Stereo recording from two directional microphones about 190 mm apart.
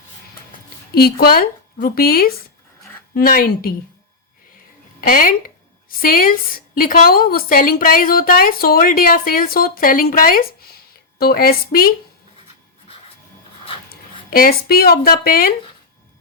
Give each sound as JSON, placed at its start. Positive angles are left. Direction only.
{"t": 0.9, "sound": "a woman's voice", "side_deg": 50}
{"t": 4.9, "sound": "a woman's voice", "side_deg": 45}
{"t": 13.9, "sound": "speech", "side_deg": 50}